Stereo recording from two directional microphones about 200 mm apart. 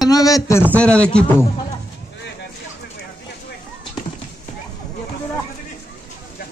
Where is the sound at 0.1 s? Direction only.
15° left (ahead or behind).